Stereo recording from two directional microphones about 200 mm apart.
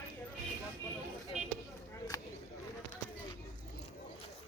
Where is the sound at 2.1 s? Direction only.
15° left (ahead or behind).